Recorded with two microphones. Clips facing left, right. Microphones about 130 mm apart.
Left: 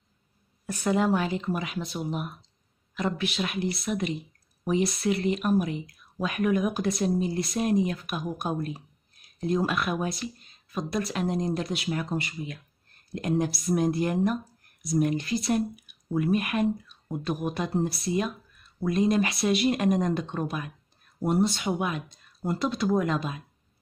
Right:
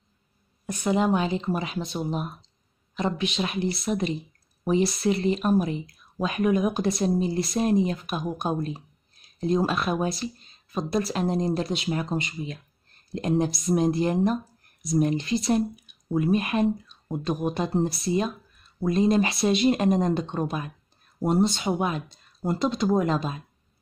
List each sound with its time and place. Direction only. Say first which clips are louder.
0.7 s speech: right 1 dB; 15° right (ahead or behind)